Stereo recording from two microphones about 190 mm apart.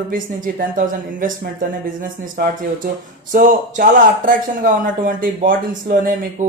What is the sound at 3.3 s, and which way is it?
Speech, 45° right (ahead or behind).